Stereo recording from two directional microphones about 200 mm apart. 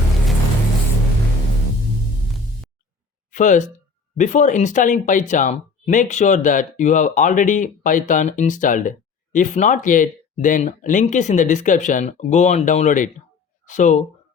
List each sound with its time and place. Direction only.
3.3 s speech: 40° left (ahead or behind)